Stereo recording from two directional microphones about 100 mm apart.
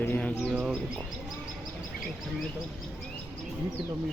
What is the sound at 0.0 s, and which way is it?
Bird, 15° left (ahead or behind).